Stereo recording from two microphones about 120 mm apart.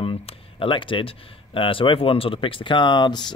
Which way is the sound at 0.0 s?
50° left (ahead or behind).